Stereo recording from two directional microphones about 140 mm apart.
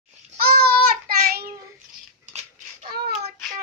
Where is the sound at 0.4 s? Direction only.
90° right.